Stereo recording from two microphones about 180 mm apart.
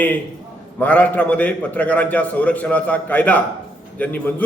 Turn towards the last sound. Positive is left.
turn(degrees=10)  # may be behind; listen again after turning